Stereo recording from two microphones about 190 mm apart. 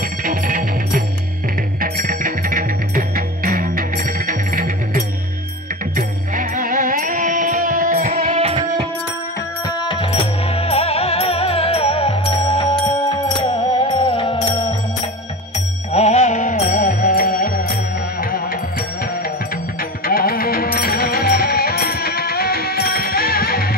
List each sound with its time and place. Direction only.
0.2 s music: 45° right (ahead or behind)
8.3 s music: 30° right (ahead or behind)
9.7 s music: 25° left (ahead or behind)
15.9 s music: 35° left (ahead or behind)
19.8 s music: 50° left (ahead or behind)